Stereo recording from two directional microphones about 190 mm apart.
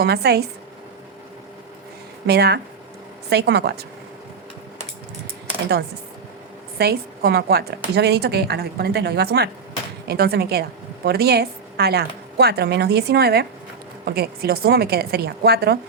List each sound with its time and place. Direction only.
0.0 s a woman's voice: 60° right (ahead or behind)
2.2 s a woman's voice: 60° right (ahead or behind)
6.7 s a woman's voice: 55° right (ahead or behind)